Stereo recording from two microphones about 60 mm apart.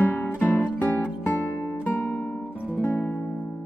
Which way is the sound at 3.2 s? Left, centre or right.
Left.